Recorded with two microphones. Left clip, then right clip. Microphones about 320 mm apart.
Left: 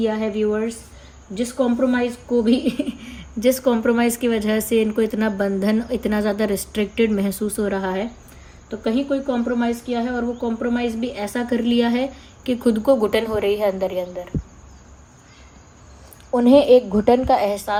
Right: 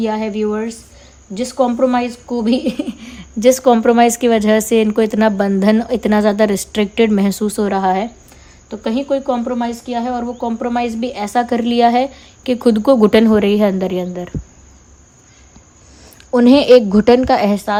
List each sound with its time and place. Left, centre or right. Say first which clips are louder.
0.0 s a woman's voice: right 3 dB; right
17.2 s a woman's voice: right 4 dB; right